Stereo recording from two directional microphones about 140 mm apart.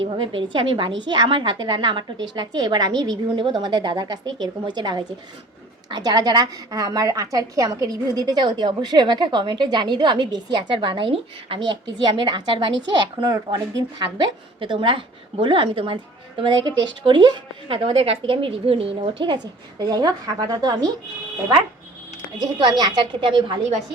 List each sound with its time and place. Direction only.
0.0 s a woman's voice: 40° right (ahead or behind)
22.8 s a woman's voice: 35° right (ahead or behind)